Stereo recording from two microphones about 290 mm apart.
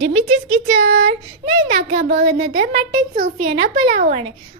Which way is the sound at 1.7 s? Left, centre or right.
Right.